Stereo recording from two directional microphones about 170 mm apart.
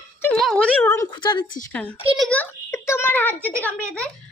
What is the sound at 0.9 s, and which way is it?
Speech, 20° left (ahead or behind).